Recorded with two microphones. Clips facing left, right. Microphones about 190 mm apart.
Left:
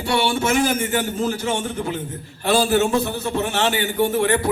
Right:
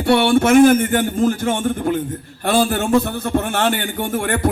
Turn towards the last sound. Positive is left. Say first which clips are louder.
# left 3 dB
turn(degrees=-50)  # may be behind; listen again after turning